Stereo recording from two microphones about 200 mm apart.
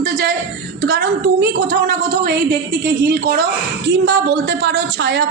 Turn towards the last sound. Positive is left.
turn(degrees=-60)  # may be behind; listen again after turning